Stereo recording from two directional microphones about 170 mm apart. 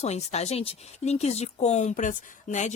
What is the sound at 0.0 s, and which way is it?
Speech, 40° left (ahead or behind).